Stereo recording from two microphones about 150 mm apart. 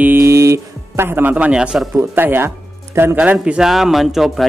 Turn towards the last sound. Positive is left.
turn(degrees=0)  # may be behind; listen again after turning